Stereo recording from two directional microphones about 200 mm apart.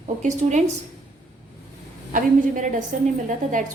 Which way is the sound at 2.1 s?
40° right (ahead or behind).